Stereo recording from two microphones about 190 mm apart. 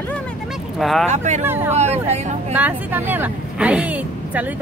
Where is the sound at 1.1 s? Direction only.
35° right (ahead or behind).